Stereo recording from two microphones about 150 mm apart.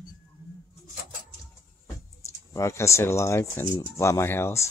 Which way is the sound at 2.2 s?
20° left (ahead or behind).